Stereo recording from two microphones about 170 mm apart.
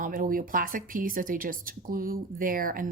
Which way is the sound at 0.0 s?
55° right (ahead or behind).